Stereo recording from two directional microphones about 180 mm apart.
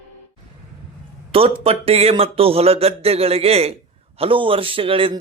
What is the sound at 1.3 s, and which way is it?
Speech, 30° right (ahead or behind).